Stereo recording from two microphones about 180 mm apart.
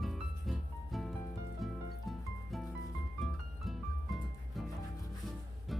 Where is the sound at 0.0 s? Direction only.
Centre (ahead or behind).